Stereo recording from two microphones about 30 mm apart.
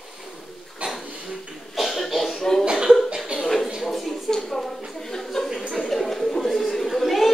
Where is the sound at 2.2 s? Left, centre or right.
Centre.